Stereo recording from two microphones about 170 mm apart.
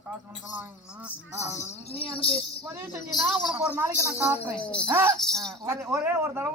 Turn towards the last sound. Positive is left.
turn(degrees=-15)  # may be behind; listen again after turning